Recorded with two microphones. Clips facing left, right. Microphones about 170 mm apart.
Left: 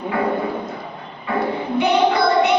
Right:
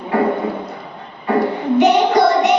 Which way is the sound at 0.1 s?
40° right (ahead or behind).